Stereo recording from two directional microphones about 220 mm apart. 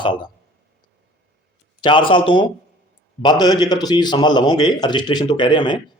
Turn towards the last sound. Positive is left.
turn(degrees=20)  # may be behind; listen again after turning